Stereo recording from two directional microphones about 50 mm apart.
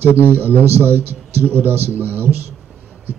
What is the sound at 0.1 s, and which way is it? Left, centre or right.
A man's voice, right.